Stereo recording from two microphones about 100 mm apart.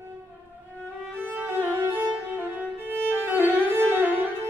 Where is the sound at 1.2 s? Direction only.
20° right (ahead or behind).